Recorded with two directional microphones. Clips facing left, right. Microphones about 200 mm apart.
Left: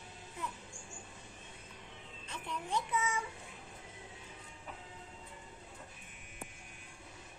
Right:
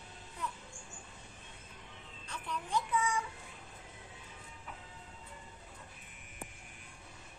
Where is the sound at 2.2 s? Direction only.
25° left (ahead or behind).